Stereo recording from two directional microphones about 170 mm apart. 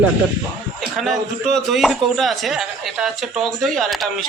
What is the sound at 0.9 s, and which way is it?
Speech, centre (ahead or behind).